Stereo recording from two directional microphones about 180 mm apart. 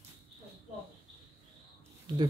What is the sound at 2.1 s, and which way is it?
Speech, 25° right (ahead or behind).